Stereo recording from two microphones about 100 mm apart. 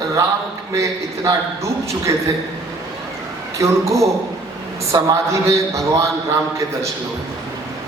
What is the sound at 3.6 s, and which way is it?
A man's voice, 30° right (ahead or behind).